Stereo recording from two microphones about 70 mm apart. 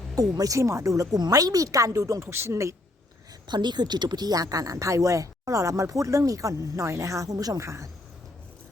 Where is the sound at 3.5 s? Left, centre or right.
Right.